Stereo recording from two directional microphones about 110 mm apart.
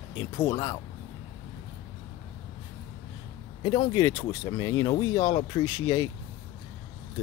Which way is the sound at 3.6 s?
45° left (ahead or behind).